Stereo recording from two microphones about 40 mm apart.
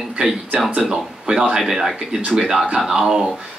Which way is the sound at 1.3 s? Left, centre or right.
Right.